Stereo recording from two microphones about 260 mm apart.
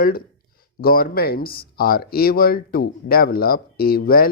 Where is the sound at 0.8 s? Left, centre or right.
Left.